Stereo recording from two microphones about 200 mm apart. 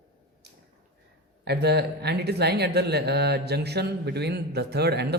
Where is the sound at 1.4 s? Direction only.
55° right (ahead or behind).